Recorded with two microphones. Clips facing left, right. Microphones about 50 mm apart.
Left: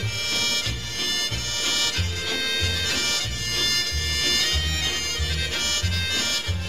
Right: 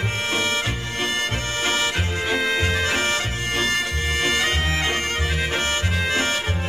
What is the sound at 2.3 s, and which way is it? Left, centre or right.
Music, right.